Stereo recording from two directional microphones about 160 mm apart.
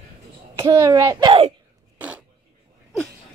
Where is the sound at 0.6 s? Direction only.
20° right (ahead or behind).